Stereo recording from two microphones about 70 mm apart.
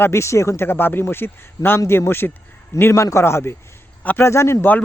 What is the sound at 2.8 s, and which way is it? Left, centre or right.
Speech, left.